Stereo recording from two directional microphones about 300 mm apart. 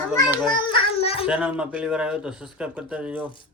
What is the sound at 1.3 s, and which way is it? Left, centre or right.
Speech, centre.